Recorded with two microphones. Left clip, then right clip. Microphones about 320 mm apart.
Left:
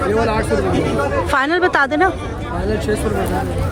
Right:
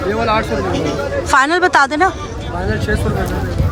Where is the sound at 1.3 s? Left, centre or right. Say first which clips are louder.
Right 6 dB; centre.